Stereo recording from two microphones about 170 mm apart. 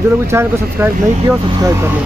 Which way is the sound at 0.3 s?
15° right (ahead or behind).